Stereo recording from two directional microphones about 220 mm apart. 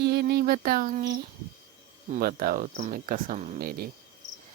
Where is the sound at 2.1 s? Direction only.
40° right (ahead or behind).